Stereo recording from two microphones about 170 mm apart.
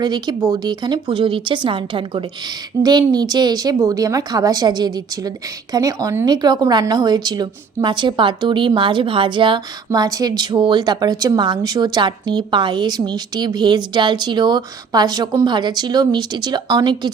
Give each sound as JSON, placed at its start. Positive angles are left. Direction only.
{"t": 0.0, "sound": "speech", "side_deg": -25}